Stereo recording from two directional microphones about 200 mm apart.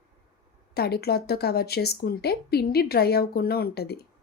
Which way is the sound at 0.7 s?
55° left (ahead or behind).